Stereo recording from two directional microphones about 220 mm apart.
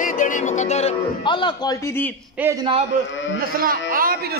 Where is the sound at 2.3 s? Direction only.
10° right (ahead or behind).